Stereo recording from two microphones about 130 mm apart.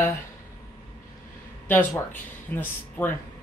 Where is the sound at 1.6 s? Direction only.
15° left (ahead or behind).